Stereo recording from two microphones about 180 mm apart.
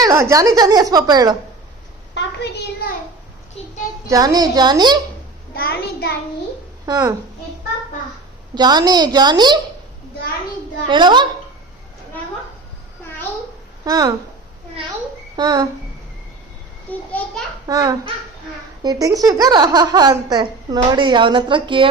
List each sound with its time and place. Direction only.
0.0 s a woman's voice: 20° right (ahead or behind)
2.1 s a sound: 70° left (ahead or behind)
4.1 s a woman's voice: 20° right (ahead or behind)
5.5 s a child's voice: 60° left (ahead or behind)
6.8 s a child's voice: 15° right (ahead or behind)
8.5 s a woman's voice: 25° right (ahead or behind)
10.8 s a woman's voice: 25° right (ahead or behind)
13.8 s a woman's voice: 20° right (ahead or behind)
15.4 s a woman's voice: 20° right (ahead or behind)
16.9 s a child's voice: 10° left (ahead or behind)
17.7 s a woman's voice: 20° right (ahead or behind)